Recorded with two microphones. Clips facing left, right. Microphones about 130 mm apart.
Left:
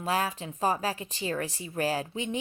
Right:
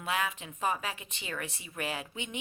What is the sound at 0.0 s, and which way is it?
A woman's voice, 35° left (ahead or behind).